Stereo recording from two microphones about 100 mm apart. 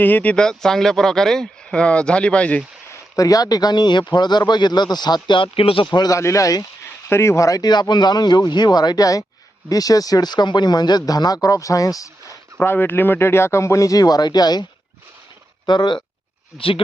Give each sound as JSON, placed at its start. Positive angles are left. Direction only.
{"t": 0.0, "sound": "speech", "side_deg": 15}
{"t": 3.2, "sound": "a man's voice", "side_deg": 35}
{"t": 5.9, "sound": "a man's voice", "side_deg": 45}
{"t": 6.1, "sound": "a man's voice", "side_deg": 30}
{"t": 12.5, "sound": "a man's voice", "side_deg": 20}
{"t": 16.6, "sound": "speech", "side_deg": 65}